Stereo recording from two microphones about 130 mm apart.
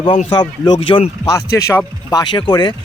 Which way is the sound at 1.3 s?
25° left (ahead or behind).